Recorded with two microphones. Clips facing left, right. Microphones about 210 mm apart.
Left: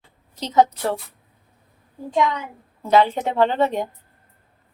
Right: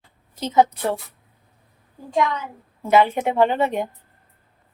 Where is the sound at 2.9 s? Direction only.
10° right (ahead or behind).